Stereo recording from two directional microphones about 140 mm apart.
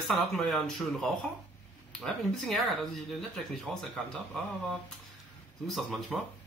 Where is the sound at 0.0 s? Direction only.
Centre (ahead or behind).